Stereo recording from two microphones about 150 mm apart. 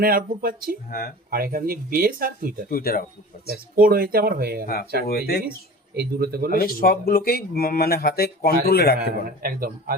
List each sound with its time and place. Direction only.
0.0 s speech: 80° right
0.9 s speech: 85° left
1.3 s speech: 75° right (ahead or behind)
2.6 s speech: 75° left (ahead or behind)
3.5 s speech: 75° right (ahead or behind)
4.6 s speech: 85° left
5.9 s speech: 90° right
6.6 s speech: 80° left
9.4 s speech: 70° right (ahead or behind)